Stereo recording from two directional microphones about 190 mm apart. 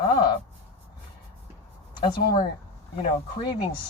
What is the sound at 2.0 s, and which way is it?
Speech, 25° left (ahead or behind).